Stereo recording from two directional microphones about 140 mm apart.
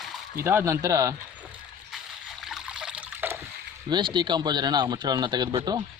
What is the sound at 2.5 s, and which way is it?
Trickle, 5° right (ahead or behind).